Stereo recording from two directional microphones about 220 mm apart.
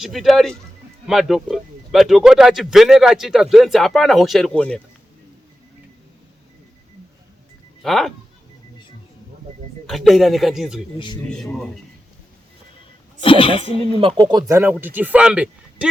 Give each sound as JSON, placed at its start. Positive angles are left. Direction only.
{"t": 0.0, "sound": "a man's voice", "side_deg": 0}
{"t": 7.8, "sound": "speech", "side_deg": 0}
{"t": 9.8, "sound": "a man's voice", "side_deg": 0}
{"t": 10.9, "sound": "speech", "side_deg": 20}
{"t": 11.5, "sound": "a man's voice", "side_deg": 0}
{"t": 13.2, "sound": "speech", "side_deg": 25}
{"t": 14.2, "sound": "speech", "side_deg": -20}